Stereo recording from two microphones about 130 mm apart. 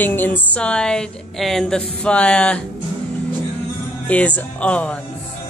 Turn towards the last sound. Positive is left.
turn(degrees=10)  # may be behind; listen again after turning